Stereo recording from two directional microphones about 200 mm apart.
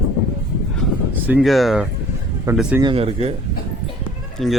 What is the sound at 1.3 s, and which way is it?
A man's voice, 5° right (ahead or behind).